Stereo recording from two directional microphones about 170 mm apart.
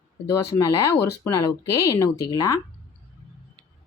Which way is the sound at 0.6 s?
15° left (ahead or behind).